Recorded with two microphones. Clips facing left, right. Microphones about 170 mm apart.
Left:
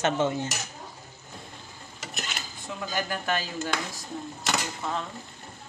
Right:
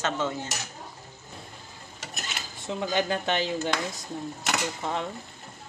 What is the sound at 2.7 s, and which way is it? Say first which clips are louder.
Speech: right 5 dB; 25° right (ahead or behind).